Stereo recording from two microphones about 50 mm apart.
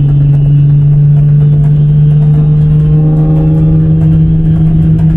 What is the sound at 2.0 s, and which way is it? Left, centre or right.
Vehicle, right.